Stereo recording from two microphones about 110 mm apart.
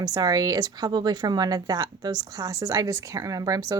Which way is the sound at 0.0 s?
35° right (ahead or behind).